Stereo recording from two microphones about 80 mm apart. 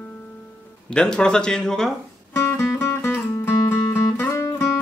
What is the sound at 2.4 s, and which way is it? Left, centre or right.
Music, left.